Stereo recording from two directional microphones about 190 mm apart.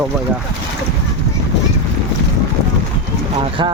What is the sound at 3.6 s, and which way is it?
Speech, 25° right (ahead or behind).